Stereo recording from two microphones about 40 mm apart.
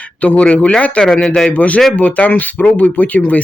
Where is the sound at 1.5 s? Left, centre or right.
Left.